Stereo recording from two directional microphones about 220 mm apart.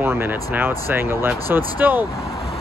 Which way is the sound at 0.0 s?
10° right (ahead or behind).